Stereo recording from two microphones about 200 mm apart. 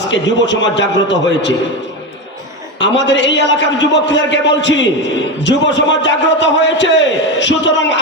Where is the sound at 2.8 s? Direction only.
65° left (ahead or behind).